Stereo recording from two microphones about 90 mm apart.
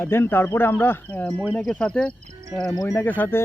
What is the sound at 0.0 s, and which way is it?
Speech, 25° left (ahead or behind).